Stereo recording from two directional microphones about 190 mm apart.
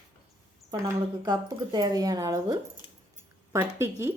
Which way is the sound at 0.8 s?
20° right (ahead or behind).